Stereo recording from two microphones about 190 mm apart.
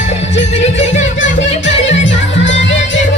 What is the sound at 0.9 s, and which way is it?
Music, 75° left (ahead or behind).